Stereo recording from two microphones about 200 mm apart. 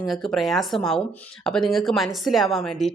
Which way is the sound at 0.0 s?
Centre (ahead or behind).